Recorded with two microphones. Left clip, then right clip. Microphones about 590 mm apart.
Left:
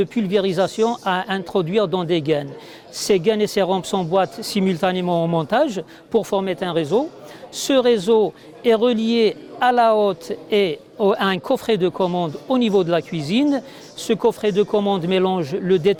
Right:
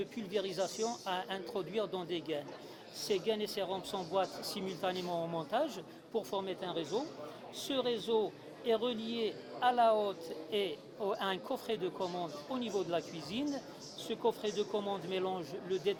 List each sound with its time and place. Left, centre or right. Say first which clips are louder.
0.0 s a man's voice: left 18 dB; left